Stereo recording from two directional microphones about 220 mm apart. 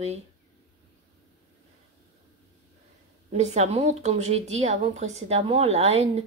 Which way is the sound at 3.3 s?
30° right (ahead or behind).